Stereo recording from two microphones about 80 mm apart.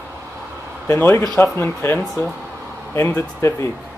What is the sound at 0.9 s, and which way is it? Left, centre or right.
Speech, left.